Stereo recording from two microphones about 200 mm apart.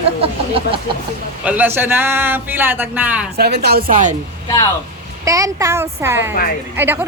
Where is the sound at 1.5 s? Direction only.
10° right (ahead or behind).